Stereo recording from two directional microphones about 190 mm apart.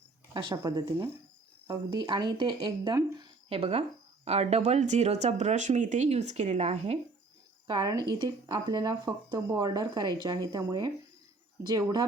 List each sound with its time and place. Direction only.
0.3 s speech: 20° right (ahead or behind)
7.7 s speech: 20° right (ahead or behind)